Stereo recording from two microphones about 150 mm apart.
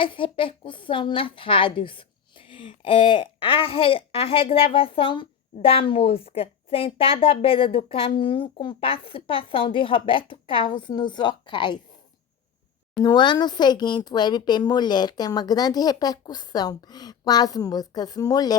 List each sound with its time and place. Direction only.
0.0 s a woman's voice: 35° left (ahead or behind)
13.0 s speech: 30° left (ahead or behind)